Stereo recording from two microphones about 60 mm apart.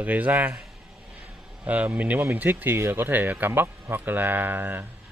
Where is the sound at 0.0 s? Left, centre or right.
Right.